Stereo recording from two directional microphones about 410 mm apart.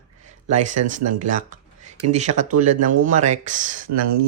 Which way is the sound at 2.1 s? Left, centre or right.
Centre.